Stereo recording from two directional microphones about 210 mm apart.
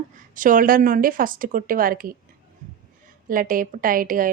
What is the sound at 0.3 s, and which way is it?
A woman's voice, 40° right (ahead or behind).